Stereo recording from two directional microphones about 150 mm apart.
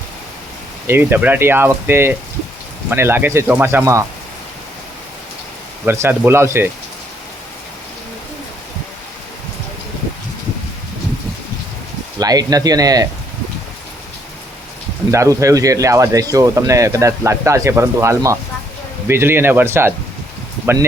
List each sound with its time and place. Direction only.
0.9 s speech: 15° right (ahead or behind)
5.8 s speech: 15° right (ahead or behind)
12.2 s speech: 25° right (ahead or behind)
15.1 s speech: 20° right (ahead or behind)